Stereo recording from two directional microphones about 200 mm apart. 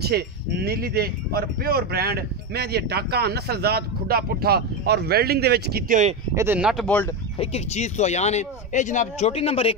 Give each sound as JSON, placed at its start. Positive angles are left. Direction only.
{"t": 0.0, "sound": "speech", "side_deg": -50}
{"t": 6.3, "sound": "speech", "side_deg": -10}
{"t": 7.3, "sound": "speech", "side_deg": 35}